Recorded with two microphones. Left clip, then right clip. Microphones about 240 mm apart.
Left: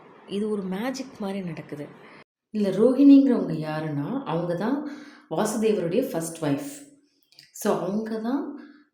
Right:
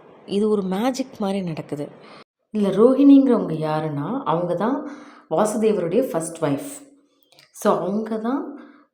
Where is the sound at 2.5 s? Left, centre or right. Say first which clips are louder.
Right 5 dB; centre.